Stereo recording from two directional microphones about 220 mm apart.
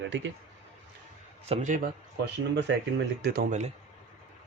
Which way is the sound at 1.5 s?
35° right (ahead or behind).